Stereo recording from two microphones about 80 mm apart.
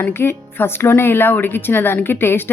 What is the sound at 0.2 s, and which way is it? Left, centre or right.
Speech, left.